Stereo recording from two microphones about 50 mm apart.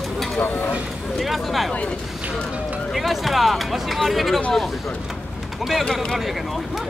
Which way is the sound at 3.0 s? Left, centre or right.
Centre.